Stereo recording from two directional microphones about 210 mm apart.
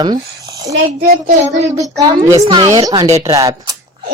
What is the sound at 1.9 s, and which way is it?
A woman's voice, 15° right (ahead or behind).